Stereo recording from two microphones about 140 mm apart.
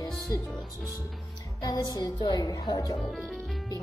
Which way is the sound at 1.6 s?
30° left (ahead or behind).